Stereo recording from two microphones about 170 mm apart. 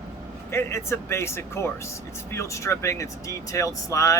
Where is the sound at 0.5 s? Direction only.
15° left (ahead or behind).